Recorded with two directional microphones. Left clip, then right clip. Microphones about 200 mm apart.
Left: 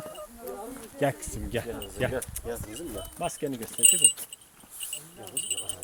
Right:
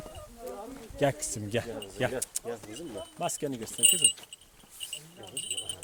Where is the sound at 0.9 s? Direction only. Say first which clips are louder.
Even; 50° right (ahead or behind).